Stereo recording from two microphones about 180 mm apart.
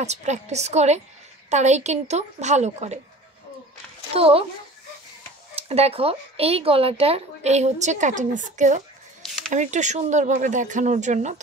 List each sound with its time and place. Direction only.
0.0 s speech: 40° right (ahead or behind)
4.1 s speech: 30° right (ahead or behind)
5.6 s speech: 35° right (ahead or behind)